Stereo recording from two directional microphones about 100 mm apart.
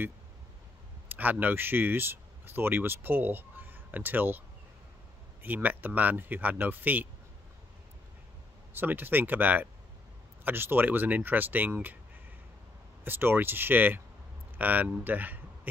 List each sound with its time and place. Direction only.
1.0 s speech: 15° right (ahead or behind)
5.4 s speech: 15° right (ahead or behind)
8.7 s speech: 20° right (ahead or behind)
13.0 s speech: 20° right (ahead or behind)